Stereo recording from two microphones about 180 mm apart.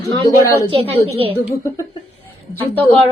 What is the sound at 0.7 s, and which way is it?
Speech, 30° right (ahead or behind).